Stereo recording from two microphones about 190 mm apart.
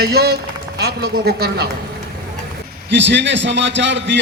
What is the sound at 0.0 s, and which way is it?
Speech, 55° right (ahead or behind).